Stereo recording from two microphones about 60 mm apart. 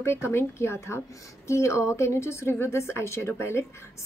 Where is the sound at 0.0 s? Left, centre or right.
Left.